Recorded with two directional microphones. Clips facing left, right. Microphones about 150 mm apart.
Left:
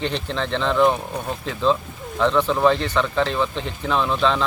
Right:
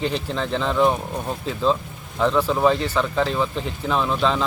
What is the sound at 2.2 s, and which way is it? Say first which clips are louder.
Speech: left 1 dB; 5° right (ahead or behind).